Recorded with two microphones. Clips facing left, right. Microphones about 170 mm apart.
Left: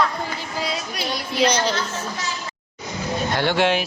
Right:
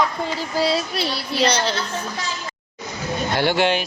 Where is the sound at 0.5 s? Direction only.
30° right (ahead or behind).